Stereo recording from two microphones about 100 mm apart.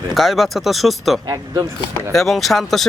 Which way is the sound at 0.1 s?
Centre (ahead or behind).